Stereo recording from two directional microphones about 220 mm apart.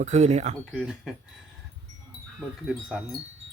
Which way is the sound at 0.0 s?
30° right (ahead or behind).